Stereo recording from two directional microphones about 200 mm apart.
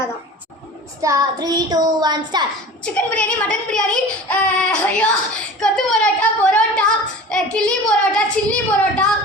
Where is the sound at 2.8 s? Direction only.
5° left (ahead or behind).